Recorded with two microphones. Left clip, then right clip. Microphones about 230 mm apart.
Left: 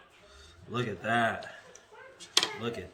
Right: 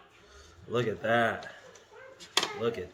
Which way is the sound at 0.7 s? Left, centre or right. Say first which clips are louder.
Right 2 dB; centre.